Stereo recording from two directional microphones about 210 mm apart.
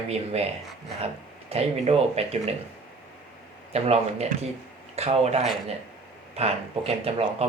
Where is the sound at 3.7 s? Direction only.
30° right (ahead or behind).